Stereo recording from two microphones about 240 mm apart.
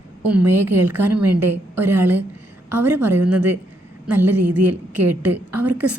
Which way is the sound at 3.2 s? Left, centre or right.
Right.